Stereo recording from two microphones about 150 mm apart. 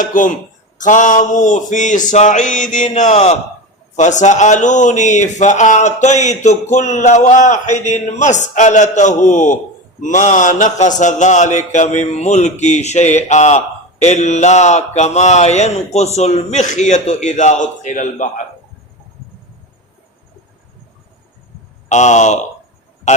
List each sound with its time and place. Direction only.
0.0 s a sound: 60° left (ahead or behind)
3.9 s speech: 55° left (ahead or behind)
21.8 s speech: 50° left (ahead or behind)